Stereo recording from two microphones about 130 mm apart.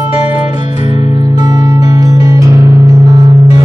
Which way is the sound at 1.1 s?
30° right (ahead or behind).